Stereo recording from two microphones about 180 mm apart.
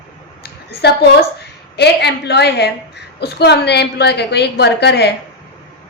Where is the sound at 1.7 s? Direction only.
65° left (ahead or behind).